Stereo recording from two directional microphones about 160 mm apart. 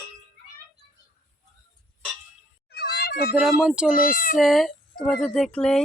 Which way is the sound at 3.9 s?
60° left (ahead or behind).